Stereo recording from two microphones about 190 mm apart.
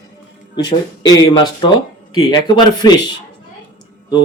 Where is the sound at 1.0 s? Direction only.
20° left (ahead or behind).